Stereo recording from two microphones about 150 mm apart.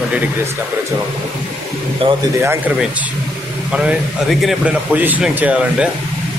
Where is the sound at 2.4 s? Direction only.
15° right (ahead or behind).